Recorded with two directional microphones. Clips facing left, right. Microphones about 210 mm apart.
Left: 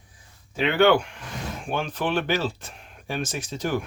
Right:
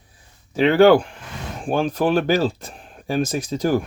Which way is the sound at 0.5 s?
40° right (ahead or behind).